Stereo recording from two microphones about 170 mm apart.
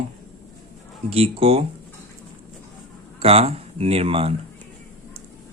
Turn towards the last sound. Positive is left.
turn(degrees=-35)  # may be behind; listen again after turning